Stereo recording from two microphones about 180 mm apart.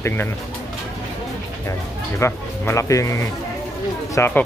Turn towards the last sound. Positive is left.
turn(degrees=15)  # may be behind; listen again after turning